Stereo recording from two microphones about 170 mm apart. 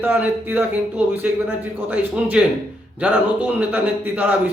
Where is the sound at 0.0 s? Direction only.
10° right (ahead or behind).